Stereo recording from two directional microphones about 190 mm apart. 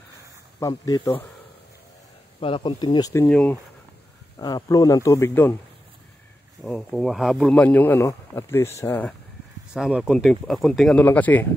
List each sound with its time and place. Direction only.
0.6 s speech: 20° left (ahead or behind)
2.4 s speech: 25° left (ahead or behind); by 3.5 s 10° left (ahead or behind)
4.4 s a man's voice: 20° left (ahead or behind)
6.6 s a man's voice: centre (ahead or behind)
9.8 s speech: centre (ahead or behind)